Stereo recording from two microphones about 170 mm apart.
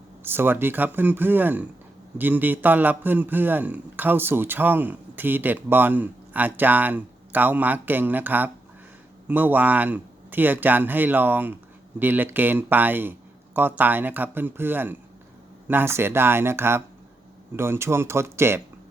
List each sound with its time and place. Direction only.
0.2 s a man's voice: 10° right (ahead or behind)